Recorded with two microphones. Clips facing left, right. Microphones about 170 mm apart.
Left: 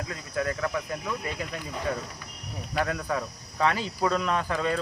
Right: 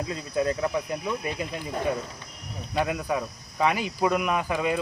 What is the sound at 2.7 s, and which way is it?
Speech, 15° right (ahead or behind).